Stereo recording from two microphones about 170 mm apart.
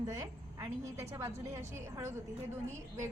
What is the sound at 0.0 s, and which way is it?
A woman's voice, 20° right (ahead or behind).